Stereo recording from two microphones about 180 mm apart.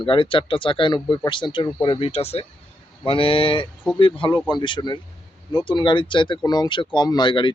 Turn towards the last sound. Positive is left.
turn(degrees=25)  # may be behind; listen again after turning